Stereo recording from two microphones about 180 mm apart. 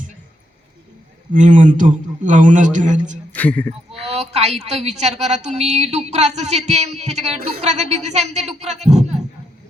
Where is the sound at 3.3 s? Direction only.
10° left (ahead or behind).